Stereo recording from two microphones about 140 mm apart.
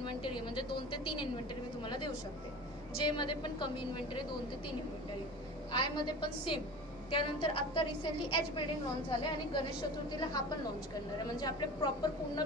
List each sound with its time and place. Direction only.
0.0 s a woman's voice: 35° left (ahead or behind)
3.0 s a woman's voice: 35° left (ahead or behind)
5.7 s a woman's voice: 35° left (ahead or behind)